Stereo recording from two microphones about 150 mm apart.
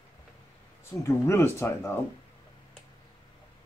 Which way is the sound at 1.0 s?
15° left (ahead or behind).